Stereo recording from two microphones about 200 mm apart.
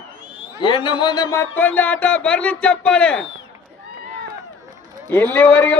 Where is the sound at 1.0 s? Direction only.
20° left (ahead or behind).